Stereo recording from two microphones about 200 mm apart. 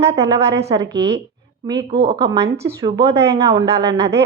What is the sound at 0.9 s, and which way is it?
Speech, 60° right (ahead or behind).